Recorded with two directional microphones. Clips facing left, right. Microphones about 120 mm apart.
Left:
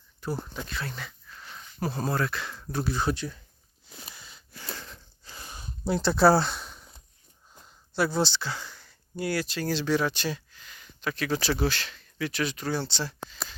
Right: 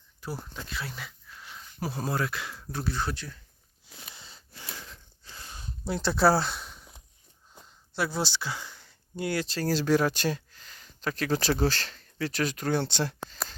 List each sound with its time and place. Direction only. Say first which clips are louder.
0.2 s speech: left 5 dB; 5° right (ahead or behind)
2.9 s speech: left 5 dB; 15° left (ahead or behind)
4.1 s a sound: left 1 dB; 30° right (ahead or behind)
5.3 s a sound: left 1 dB; 10° left (ahead or behind)
5.9 s speech: left 3 dB; centre (ahead or behind)
7.9 s speech: left 4 dB; centre (ahead or behind); by 9.5 s 20° right (ahead or behind)
9.5 s speech: right 5 dB; 40° right (ahead or behind)